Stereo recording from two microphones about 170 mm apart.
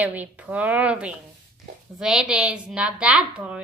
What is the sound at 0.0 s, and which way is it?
A woman's voice, 10° right (ahead or behind).